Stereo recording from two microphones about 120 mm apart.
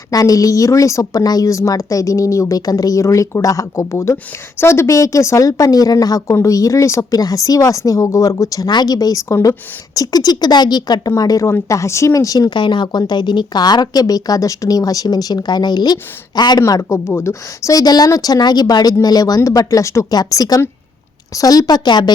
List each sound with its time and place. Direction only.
0.1 s a woman's voice: 30° left (ahead or behind)